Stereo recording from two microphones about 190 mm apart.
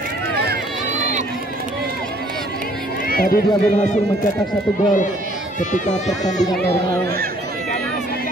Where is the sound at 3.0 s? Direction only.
50° left (ahead or behind).